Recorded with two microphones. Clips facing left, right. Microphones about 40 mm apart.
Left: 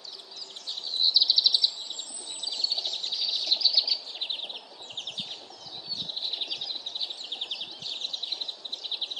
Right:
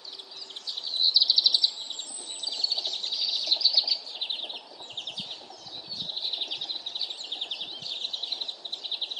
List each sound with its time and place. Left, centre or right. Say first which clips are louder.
1.0 s bird vocalization: even; centre
2.4 s bird: even; centre
7.2 s bird: even; centre
8.9 s bird vocalization: even; centre